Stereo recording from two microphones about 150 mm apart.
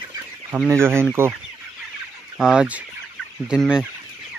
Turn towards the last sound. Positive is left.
turn(degrees=-5)  # may be behind; listen again after turning